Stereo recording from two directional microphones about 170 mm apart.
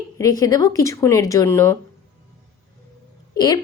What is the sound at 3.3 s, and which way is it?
Speech, 25° left (ahead or behind).